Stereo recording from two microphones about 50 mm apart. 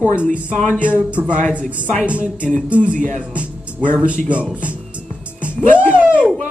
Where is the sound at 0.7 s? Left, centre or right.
Right.